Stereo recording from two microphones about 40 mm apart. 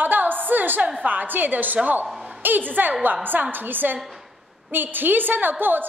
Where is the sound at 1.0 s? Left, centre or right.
Right.